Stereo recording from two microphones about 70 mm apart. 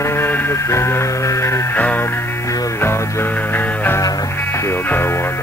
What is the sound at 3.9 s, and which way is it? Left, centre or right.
Music, left.